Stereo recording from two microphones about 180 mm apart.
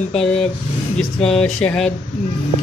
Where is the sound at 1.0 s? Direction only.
5° left (ahead or behind).